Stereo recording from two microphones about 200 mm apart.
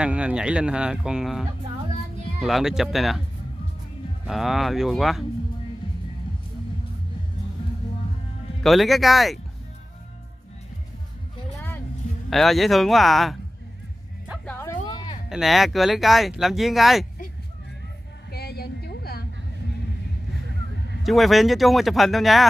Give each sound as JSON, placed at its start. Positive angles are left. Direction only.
{"t": 0.0, "sound": "speech", "side_deg": -5}
{"t": 2.4, "sound": "speech", "side_deg": 0}
{"t": 4.3, "sound": "speech", "side_deg": 0}
{"t": 8.6, "sound": "speech", "side_deg": 0}
{"t": 12.3, "sound": "speech", "side_deg": 0}
{"t": 14.4, "sound": "music", "side_deg": 10}
{"t": 14.9, "sound": "a sound", "side_deg": 20}
{"t": 15.2, "sound": "speech", "side_deg": 0}
{"t": 18.3, "sound": "a sound", "side_deg": 50}
{"t": 21.0, "sound": "speech", "side_deg": 0}